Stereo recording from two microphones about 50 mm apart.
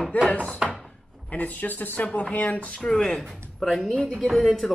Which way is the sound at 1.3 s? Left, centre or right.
Left.